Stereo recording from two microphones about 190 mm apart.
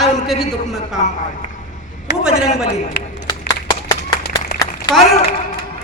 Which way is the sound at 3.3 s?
20° left (ahead or behind).